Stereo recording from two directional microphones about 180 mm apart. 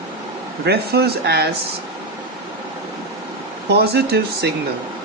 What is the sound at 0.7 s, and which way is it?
Speech, 60° right (ahead or behind).